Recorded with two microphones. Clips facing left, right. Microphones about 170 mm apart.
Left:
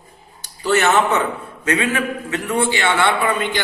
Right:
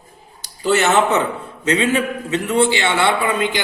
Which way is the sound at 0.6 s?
20° right (ahead or behind).